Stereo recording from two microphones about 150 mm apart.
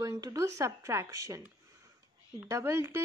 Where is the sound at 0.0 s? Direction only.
25° right (ahead or behind).